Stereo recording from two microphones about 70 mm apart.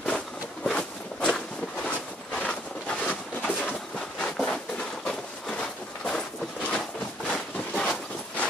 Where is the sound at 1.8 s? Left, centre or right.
Centre.